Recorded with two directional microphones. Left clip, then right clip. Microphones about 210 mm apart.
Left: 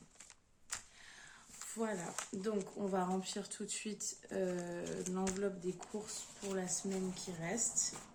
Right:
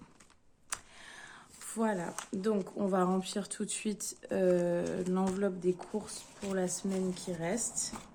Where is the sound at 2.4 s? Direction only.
55° right (ahead or behind).